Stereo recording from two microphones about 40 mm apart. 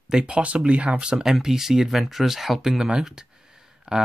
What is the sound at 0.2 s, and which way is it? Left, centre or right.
Speech, right.